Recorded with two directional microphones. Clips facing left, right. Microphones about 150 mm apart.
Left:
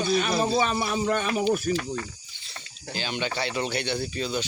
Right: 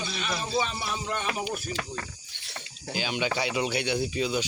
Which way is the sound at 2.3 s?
75° right (ahead or behind).